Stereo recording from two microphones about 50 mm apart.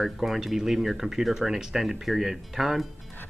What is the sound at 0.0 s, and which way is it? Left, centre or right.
Speech, centre.